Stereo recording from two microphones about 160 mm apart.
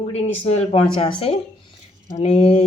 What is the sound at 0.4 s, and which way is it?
Speech, 40° left (ahead or behind).